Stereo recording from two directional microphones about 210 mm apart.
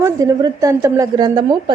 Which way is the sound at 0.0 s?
15° right (ahead or behind).